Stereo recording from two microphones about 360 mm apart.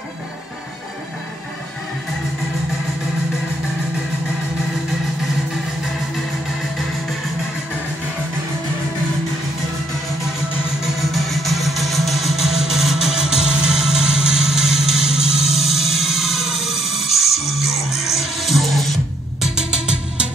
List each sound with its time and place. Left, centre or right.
10.8 s music: centre
14.8 s vehicle: centre
15.0 s music: centre
16.0 s music: centre
16.8 s music: centre
18.2 s music: centre